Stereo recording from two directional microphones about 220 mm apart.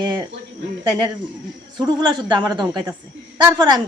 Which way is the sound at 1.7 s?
20° right (ahead or behind).